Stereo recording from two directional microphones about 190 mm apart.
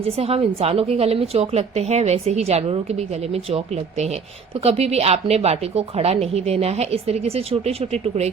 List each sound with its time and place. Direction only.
0.0 s speech: 30° right (ahead or behind)